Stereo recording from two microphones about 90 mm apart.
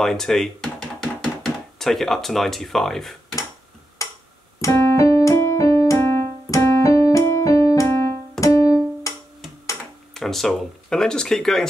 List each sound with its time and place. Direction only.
0.0 s speech: 5° left (ahead or behind)
4.6 s keyboard: 40° left (ahead or behind)
8.4 s music: 40° left (ahead or behind)
10.1 s speech: 5° left (ahead or behind)